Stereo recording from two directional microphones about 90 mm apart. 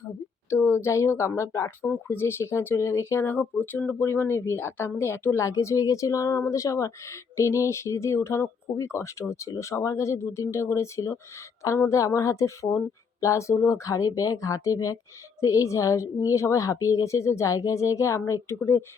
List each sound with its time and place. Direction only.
0.5 s a woman's voice: 30° left (ahead or behind)